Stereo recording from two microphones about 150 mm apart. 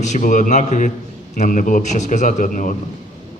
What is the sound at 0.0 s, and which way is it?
A man's voice, 55° left (ahead or behind).